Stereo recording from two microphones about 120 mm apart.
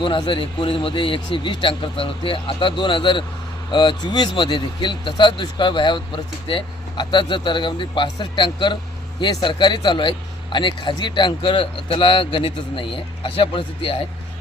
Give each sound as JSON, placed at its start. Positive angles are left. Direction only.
{"t": 0.0, "sound": "speech", "side_deg": 40}